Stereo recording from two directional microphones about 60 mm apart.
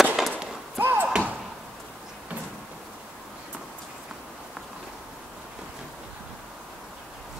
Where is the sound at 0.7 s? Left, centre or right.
Right.